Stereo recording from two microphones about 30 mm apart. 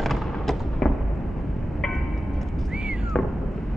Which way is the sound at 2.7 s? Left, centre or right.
Right.